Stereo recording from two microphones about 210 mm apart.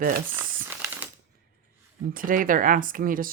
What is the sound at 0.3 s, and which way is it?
Crumpling, 10° right (ahead or behind).